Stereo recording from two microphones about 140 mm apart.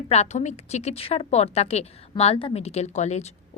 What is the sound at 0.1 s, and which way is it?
A woman's voice, 55° left (ahead or behind).